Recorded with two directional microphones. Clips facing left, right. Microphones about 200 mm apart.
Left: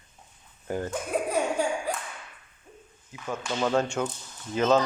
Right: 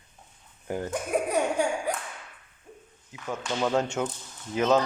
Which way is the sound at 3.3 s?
15° right (ahead or behind).